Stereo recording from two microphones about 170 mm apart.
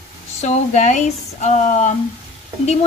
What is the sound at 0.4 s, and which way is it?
A woman's voice, 45° left (ahead or behind).